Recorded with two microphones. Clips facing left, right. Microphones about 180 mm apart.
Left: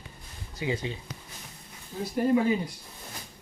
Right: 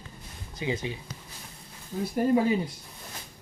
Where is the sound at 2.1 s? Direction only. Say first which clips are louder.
Even; 40° right (ahead or behind).